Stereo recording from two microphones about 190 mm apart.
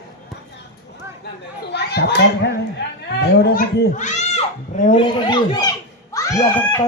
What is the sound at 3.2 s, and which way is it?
Speech, 60° left (ahead or behind).